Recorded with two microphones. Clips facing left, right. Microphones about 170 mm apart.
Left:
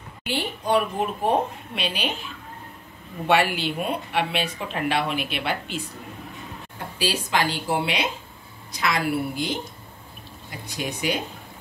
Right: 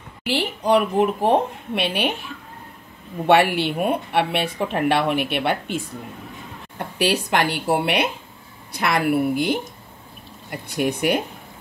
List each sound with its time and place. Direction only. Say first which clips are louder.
0.3 s speech: right 4 dB; 85° right
1.8 s speech: right 5 dB; 65° right (ahead or behind)
3.3 s speech: right 5 dB; 60° right (ahead or behind)
7.0 s speech: right 4 dB; 60° right (ahead or behind)